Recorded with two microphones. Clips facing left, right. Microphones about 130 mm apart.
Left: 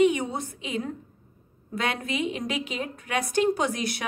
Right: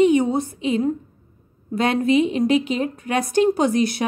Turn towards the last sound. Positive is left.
turn(degrees=-30)  # may be behind; listen again after turning